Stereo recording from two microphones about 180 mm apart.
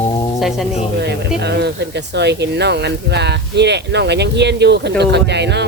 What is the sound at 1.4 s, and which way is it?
Speech, 70° right (ahead or behind).